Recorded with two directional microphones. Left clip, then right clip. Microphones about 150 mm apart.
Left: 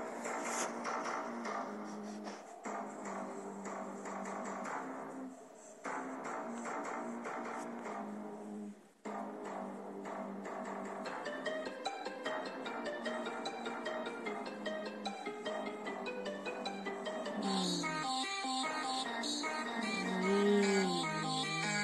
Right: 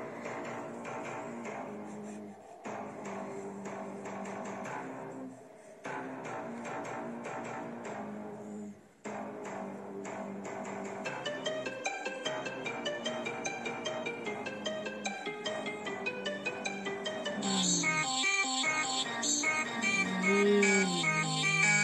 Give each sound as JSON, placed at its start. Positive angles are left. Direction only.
{"t": 12.3, "sound": "music", "side_deg": -30}